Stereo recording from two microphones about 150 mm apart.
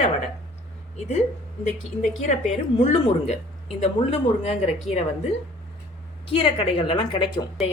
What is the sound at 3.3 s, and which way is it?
Speech, 45° left (ahead or behind).